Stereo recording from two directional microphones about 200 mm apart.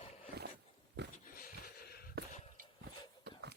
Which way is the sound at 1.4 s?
50° left (ahead or behind).